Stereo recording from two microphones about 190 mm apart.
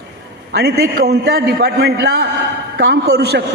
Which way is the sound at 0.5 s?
55° right (ahead or behind).